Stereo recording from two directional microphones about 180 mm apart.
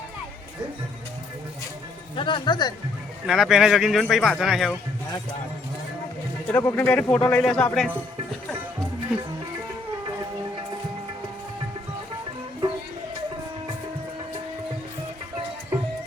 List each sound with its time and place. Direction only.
2.1 s speech: 30° left (ahead or behind)
3.2 s a man's voice: centre (ahead or behind)
6.5 s speech: 15° left (ahead or behind)